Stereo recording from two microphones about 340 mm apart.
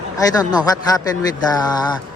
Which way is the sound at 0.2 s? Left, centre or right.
Centre.